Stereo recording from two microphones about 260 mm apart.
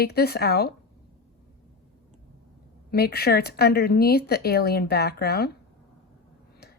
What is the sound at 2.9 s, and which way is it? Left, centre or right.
Speech, left.